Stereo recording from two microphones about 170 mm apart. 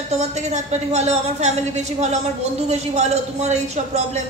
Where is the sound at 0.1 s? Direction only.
40° right (ahead or behind).